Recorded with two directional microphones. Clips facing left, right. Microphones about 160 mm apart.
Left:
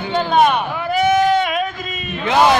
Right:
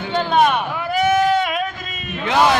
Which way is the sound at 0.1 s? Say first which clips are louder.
Left 2 dB; centre (ahead or behind).